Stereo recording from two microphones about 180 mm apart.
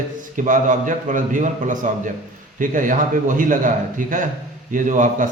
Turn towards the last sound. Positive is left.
turn(degrees=-45)  # may be behind; listen again after turning